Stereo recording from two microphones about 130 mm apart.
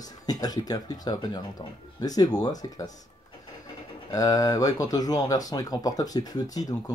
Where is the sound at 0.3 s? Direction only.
30° left (ahead or behind).